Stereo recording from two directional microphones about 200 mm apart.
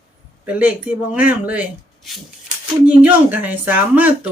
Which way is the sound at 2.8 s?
5° right (ahead or behind).